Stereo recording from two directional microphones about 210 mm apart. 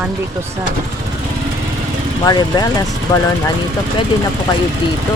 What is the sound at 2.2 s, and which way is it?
Speech, 20° left (ahead or behind).